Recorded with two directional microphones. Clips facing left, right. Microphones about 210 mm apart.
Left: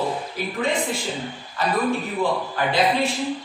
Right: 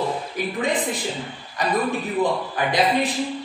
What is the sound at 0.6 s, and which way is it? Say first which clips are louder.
A woman's voice: left 1 dB; 15° right (ahead or behind).